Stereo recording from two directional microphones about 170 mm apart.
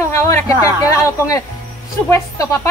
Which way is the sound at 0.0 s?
15° left (ahead or behind).